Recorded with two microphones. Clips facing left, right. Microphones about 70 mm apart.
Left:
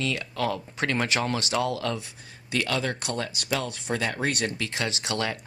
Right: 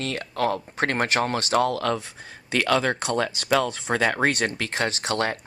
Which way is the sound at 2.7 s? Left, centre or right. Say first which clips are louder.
Right 6 dB; right.